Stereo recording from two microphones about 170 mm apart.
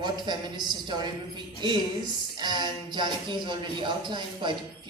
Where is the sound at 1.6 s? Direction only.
25° right (ahead or behind).